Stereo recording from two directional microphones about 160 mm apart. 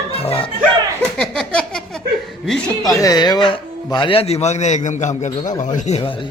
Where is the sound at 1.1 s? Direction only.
5° left (ahead or behind).